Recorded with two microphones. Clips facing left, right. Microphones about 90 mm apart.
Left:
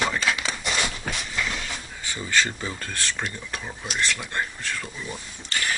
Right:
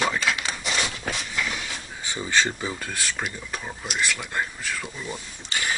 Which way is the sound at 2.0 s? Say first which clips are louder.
Right 1 dB; 15° right (ahead or behind).